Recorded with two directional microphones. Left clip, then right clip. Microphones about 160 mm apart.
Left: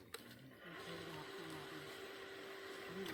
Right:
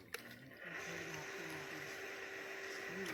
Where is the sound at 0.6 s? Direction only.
90° left.